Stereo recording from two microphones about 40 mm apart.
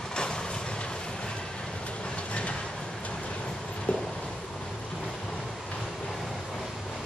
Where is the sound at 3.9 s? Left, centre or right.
Left.